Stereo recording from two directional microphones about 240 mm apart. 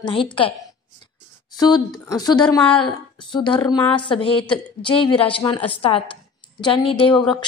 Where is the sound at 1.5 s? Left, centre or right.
Centre.